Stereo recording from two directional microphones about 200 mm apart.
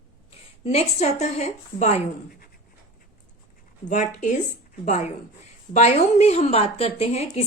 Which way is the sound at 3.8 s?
35° left (ahead or behind).